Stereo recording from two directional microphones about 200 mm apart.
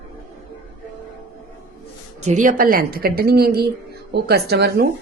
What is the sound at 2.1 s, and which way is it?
Speech, 35° right (ahead or behind).